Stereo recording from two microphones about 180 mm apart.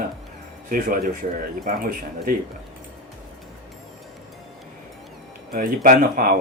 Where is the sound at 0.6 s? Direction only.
50° right (ahead or behind).